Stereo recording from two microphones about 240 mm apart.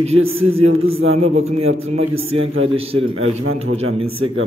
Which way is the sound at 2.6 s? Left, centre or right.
Right.